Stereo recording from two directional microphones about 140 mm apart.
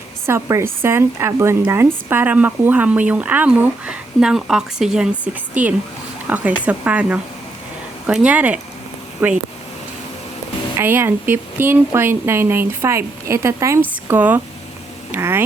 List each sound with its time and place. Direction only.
0.3 s speech: 20° right (ahead or behind)
10.8 s speech: 15° right (ahead or behind)